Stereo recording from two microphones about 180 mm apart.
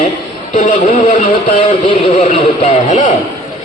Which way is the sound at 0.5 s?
45° left (ahead or behind).